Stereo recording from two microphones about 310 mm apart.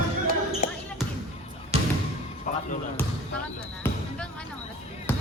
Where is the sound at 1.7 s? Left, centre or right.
Centre.